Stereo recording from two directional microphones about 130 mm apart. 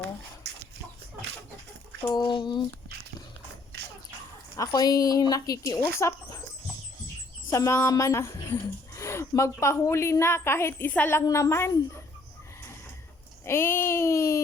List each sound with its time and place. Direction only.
2.1 s speech: 35° left (ahead or behind)
4.5 s a woman's voice: 30° left (ahead or behind)
7.5 s a woman's voice: 25° left (ahead or behind)
13.4 s a woman's voice: 20° left (ahead or behind)